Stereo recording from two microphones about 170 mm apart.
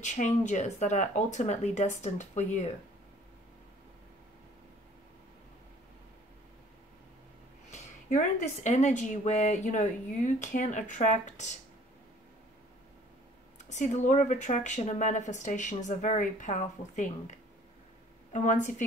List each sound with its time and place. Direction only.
0.0 s a woman's voice: 45° left (ahead or behind)
7.7 s a woman's voice: 45° left (ahead or behind)
13.6 s a woman's voice: 45° left (ahead or behind)